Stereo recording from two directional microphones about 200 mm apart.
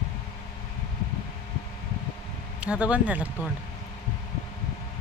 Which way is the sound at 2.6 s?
5° right (ahead or behind).